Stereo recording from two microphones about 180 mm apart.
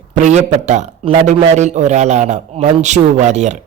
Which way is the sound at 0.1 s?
40° right (ahead or behind).